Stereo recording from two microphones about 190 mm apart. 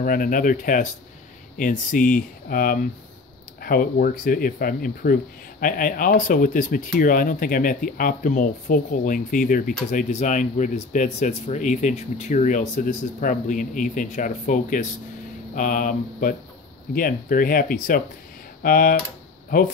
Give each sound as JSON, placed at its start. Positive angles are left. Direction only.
{"t": 0.0, "sound": "speech", "side_deg": 45}